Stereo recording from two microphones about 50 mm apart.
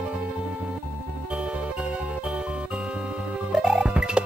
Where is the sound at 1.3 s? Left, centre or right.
Right.